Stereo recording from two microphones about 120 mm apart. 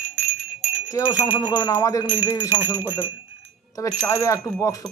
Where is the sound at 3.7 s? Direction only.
30° left (ahead or behind).